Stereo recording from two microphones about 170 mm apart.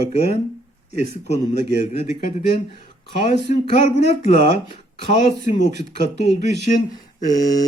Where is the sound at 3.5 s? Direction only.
40° left (ahead or behind).